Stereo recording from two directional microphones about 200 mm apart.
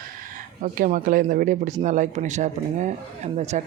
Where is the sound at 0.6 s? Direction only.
40° right (ahead or behind).